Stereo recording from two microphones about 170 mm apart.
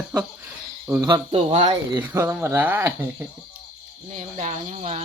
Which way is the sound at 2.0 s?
10° right (ahead or behind).